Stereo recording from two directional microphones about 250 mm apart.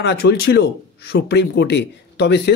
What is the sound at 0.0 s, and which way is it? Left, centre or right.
Speech, left.